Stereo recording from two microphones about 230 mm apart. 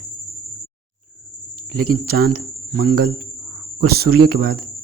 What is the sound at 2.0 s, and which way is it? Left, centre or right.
Speech, right.